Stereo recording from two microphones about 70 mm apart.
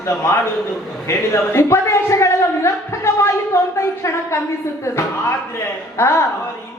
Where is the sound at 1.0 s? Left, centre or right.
Left.